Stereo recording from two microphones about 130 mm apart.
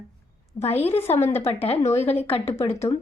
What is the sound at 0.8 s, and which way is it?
A woman's voice, 50° left (ahead or behind).